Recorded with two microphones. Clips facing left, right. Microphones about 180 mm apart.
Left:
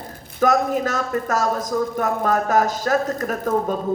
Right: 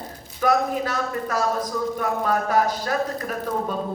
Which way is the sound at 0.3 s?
45° left (ahead or behind).